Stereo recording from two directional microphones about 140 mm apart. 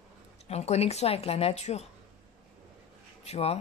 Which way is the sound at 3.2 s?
50° left (ahead or behind).